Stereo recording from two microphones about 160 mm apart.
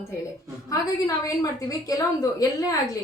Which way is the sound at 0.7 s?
20° left (ahead or behind).